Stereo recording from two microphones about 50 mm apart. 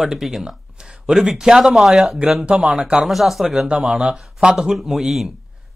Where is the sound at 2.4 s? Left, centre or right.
Right.